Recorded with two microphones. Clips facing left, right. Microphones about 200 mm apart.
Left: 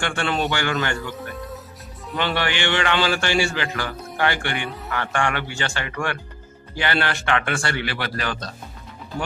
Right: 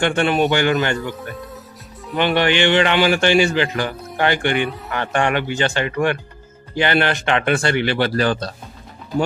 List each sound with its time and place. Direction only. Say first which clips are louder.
0.0 s a man's voice: right 7 dB; 20° right (ahead or behind)
2.1 s a man's voice: right 7 dB; 20° right (ahead or behind)